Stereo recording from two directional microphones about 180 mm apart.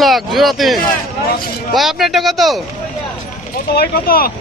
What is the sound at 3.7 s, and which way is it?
Speech, 55° left (ahead or behind).